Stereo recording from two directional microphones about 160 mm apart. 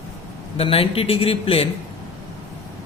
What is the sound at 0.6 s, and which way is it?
Speech, 35° left (ahead or behind).